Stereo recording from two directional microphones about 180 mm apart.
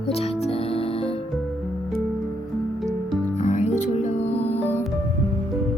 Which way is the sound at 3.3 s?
40° left (ahead or behind).